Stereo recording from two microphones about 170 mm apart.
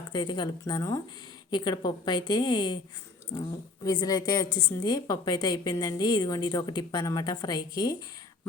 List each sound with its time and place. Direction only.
0.1 s a woman's voice: 25° left (ahead or behind)